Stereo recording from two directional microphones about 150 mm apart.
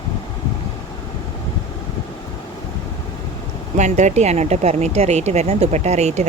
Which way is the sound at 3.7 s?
55° right (ahead or behind).